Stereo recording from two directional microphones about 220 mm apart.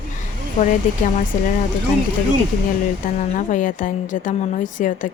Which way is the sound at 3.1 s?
35° left (ahead or behind).